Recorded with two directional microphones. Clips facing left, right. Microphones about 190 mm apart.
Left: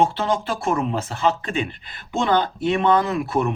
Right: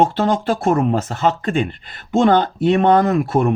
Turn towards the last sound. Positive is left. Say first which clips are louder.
# right 5 dB
turn(degrees=-45)  # may be behind; listen again after turning